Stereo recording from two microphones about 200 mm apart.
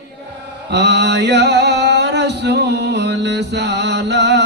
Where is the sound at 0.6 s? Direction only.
60° right (ahead or behind).